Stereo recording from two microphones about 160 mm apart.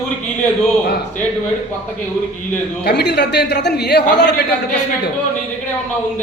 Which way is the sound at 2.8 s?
90° left.